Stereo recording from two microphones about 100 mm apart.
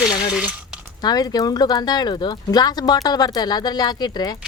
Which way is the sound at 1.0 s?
40° left (ahead or behind).